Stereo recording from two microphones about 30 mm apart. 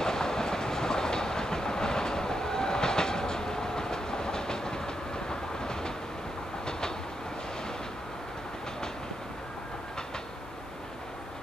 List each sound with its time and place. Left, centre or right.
0.0 s train: centre